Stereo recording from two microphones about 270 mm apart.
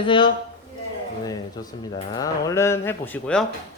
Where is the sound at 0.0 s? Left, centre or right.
Centre.